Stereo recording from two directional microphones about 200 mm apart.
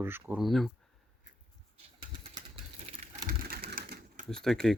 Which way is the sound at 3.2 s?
50° right (ahead or behind).